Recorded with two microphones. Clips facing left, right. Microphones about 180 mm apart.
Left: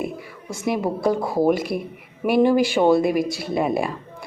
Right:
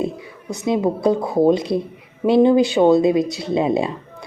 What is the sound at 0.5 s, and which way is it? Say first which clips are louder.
A woman's voice: right 4 dB; 20° right (ahead or behind).